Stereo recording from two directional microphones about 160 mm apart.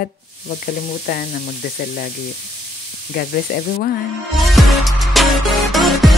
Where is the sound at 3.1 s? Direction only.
75° left (ahead or behind).